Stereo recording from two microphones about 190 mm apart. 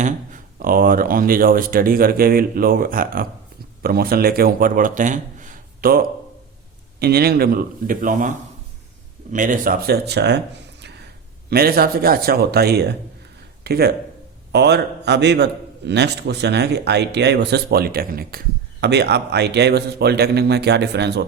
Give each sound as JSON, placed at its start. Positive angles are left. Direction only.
{"t": 0.0, "sound": "a man's voice", "side_deg": -45}
{"t": 9.3, "sound": "a man's voice", "side_deg": -45}
{"t": 11.4, "sound": "a man's voice", "side_deg": -55}
{"t": 18.8, "sound": "a man's voice", "side_deg": -60}